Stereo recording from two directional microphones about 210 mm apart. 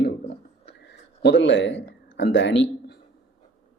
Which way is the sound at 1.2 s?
60° left (ahead or behind).